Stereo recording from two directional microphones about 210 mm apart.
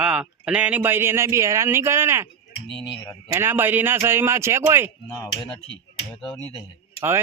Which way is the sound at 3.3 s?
10° right (ahead or behind).